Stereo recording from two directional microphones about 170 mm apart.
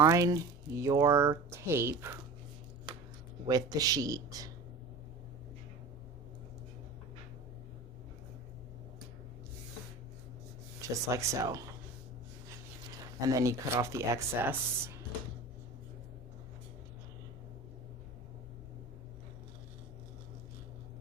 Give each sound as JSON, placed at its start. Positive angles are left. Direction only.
{"t": 0.0, "sound": "speech", "side_deg": -20}
{"t": 3.4, "sound": "speech", "side_deg": -20}
{"t": 10.8, "sound": "speech", "side_deg": -20}
{"t": 13.2, "sound": "speech", "side_deg": -20}